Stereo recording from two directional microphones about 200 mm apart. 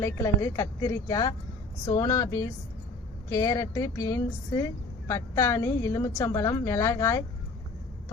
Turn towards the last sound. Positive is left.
turn(degrees=15)  # may be behind; listen again after turning